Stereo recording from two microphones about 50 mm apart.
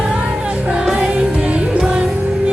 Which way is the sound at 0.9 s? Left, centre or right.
Right.